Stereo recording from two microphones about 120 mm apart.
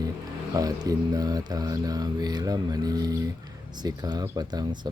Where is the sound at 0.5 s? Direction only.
30° right (ahead or behind).